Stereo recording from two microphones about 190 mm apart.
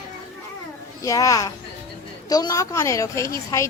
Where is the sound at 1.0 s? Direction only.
15° left (ahead or behind).